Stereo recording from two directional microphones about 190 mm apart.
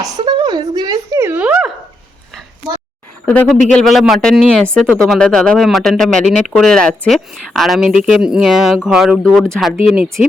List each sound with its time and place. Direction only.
0.0 s speech: 20° right (ahead or behind); by 1.7 s 5° right (ahead or behind)
3.2 s speech: 5° left (ahead or behind)